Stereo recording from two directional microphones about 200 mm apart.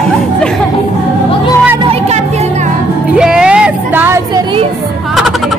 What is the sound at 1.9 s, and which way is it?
Music, 30° right (ahead or behind).